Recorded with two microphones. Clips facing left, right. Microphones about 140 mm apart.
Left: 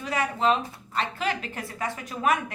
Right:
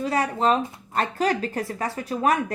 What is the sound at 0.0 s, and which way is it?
Speech, 35° right (ahead or behind).